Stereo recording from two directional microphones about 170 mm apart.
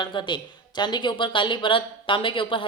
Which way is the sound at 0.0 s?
25° left (ahead or behind).